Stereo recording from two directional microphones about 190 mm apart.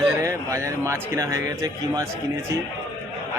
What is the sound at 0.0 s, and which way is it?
A man's voice, 15° right (ahead or behind).